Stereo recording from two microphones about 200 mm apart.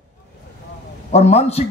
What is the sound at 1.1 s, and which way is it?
Speech, 30° left (ahead or behind).